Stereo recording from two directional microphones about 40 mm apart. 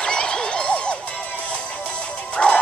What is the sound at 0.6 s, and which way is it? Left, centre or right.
Music, left.